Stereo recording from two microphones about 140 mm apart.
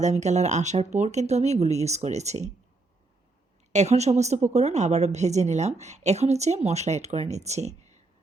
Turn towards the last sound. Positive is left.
turn(degrees=-50)  # may be behind; listen again after turning